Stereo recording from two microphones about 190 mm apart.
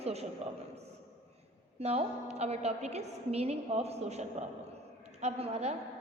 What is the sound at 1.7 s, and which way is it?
A woman's voice, 35° right (ahead or behind).